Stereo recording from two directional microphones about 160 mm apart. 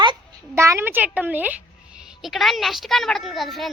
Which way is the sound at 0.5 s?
15° right (ahead or behind).